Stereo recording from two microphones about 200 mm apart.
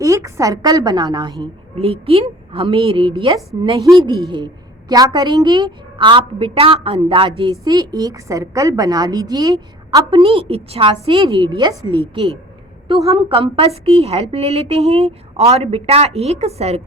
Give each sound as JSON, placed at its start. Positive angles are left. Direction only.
{"t": 0.0, "sound": "a woman's voice", "side_deg": -15}